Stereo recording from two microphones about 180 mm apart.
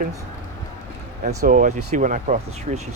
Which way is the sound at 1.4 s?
45° right (ahead or behind).